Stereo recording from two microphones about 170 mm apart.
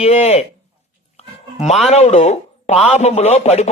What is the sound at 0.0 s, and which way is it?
Speech, 40° left (ahead or behind).